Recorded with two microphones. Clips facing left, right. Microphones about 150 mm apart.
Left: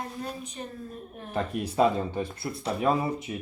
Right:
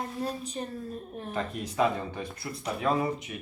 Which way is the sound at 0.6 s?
30° right (ahead or behind).